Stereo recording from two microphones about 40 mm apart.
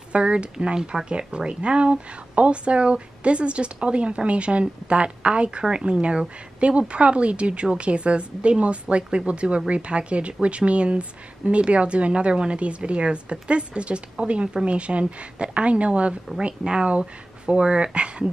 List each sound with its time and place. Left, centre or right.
0.1 s a woman's voice: right
0.7 s speech: centre
1.1 s a woman's voice: right